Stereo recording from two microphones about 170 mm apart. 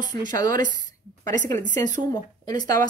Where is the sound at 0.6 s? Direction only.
50° right (ahead or behind).